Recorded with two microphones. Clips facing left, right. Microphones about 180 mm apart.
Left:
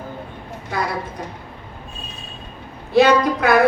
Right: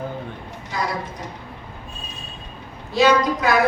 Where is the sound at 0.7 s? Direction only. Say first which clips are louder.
Left 2 dB; 60° left (ahead or behind).